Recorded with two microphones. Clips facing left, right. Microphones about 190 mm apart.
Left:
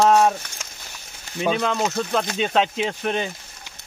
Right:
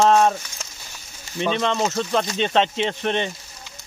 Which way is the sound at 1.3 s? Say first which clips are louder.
Even; 5° left (ahead or behind).